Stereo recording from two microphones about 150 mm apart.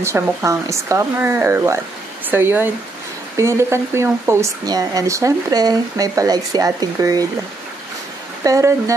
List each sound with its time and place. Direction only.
0.0 s speech: 20° right (ahead or behind)
8.5 s speech: 20° right (ahead or behind)